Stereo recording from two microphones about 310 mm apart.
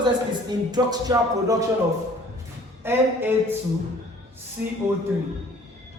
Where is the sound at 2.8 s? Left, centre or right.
Centre.